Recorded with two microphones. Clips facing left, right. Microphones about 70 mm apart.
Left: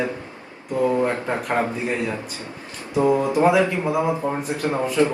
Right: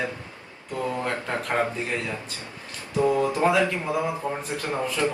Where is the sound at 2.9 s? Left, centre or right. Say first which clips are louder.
Left 4 dB; left.